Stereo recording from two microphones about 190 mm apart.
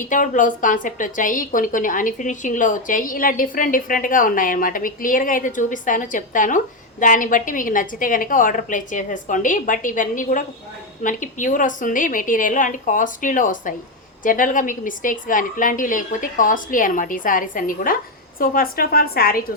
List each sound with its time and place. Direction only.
0.0 s a woman's voice: 45° left (ahead or behind)